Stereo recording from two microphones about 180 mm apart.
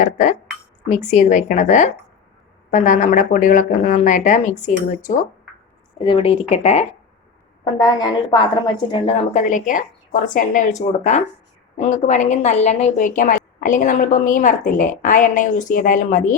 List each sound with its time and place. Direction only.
0.0 s a woman's voice: 45° left (ahead or behind)
6.0 s speech: 30° left (ahead or behind)
7.6 s a woman's voice: 25° left (ahead or behind)
9.3 s a woman's voice: 45° left (ahead or behind)